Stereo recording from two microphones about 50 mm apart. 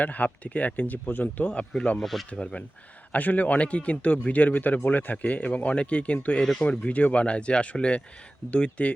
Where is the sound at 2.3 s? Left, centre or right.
Left.